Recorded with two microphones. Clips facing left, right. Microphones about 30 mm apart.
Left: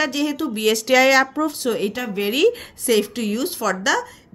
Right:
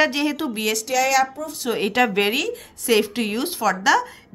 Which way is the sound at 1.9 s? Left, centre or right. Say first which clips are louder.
Right 7 dB; right.